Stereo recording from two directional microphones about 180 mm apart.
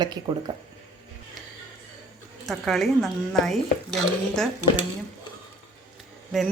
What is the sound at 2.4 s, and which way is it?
Speech, centre (ahead or behind).